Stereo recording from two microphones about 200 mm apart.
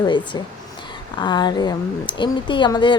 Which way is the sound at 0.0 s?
20° left (ahead or behind).